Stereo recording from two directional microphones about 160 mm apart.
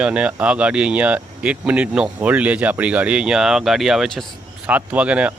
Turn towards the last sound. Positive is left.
turn(degrees=-10)  # may be behind; listen again after turning